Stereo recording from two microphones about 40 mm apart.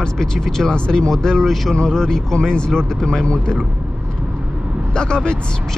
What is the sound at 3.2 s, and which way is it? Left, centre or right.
Speech, left.